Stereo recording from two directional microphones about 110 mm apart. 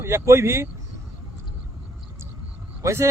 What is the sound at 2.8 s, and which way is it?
Speech, 25° right (ahead or behind).